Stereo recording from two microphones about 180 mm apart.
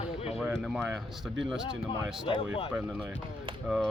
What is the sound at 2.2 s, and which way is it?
Speech, 30° left (ahead or behind).